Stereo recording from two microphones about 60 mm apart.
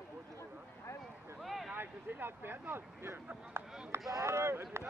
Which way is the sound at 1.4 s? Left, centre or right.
Centre.